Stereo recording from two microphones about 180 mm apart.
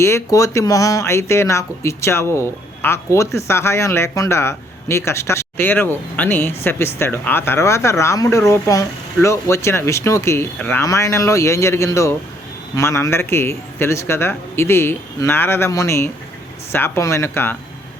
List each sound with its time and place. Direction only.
0.0 s speech: 15° left (ahead or behind)